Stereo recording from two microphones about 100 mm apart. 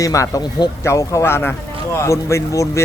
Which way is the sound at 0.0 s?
35° left (ahead or behind).